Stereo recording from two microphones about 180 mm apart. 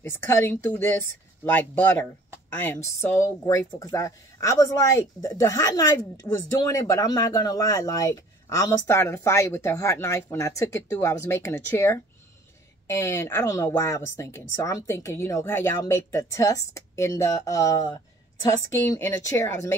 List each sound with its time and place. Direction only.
0.0 s speech: 10° left (ahead or behind)